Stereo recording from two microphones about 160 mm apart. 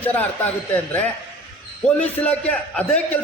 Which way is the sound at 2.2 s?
10° left (ahead or behind).